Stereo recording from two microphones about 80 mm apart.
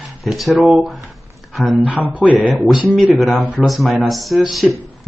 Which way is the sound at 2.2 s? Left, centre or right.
Centre.